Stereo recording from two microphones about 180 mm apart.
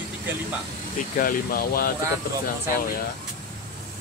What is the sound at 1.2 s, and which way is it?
Speech, 50° left (ahead or behind).